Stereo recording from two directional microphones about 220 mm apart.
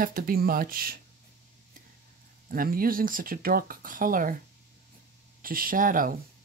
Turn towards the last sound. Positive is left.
turn(degrees=-40)  # may be behind; listen again after turning